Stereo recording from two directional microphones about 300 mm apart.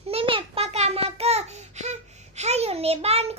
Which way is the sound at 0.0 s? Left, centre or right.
Centre.